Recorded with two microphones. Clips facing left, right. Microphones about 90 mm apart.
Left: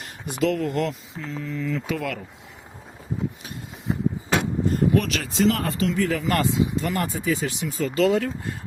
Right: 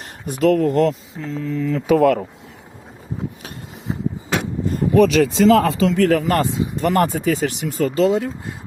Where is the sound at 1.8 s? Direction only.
50° right (ahead or behind).